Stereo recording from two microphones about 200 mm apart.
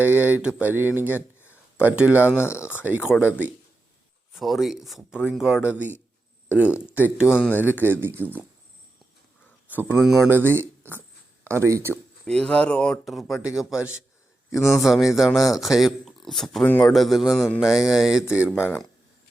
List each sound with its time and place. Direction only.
0.0 s speech: 10° right (ahead or behind)
2.3 s speech: 10° left (ahead or behind)
4.4 s speech: centre (ahead or behind)
7.3 s speech: 5° left (ahead or behind)
7.8 s speech: 10° right (ahead or behind)
9.6 s speech: 10° right (ahead or behind)
12.2 s speech: 5° left (ahead or behind)
18.6 s speech: 10° left (ahead or behind)